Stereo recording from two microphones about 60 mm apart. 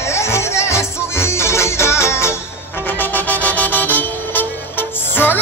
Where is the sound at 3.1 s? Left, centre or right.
Left.